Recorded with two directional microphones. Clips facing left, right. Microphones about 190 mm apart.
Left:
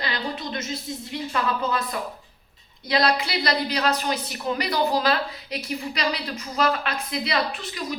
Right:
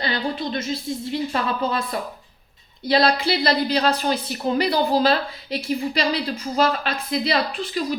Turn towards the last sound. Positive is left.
turn(degrees=-30)  # may be behind; listen again after turning